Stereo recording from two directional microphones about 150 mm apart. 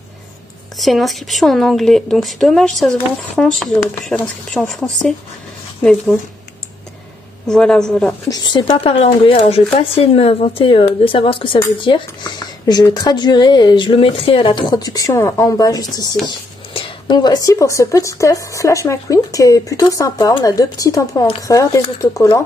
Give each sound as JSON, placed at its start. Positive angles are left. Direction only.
{"t": 0.7, "sound": "speech", "side_deg": 0}
{"t": 7.4, "sound": "speech", "side_deg": 5}
{"t": 8.3, "sound": "speech", "side_deg": 30}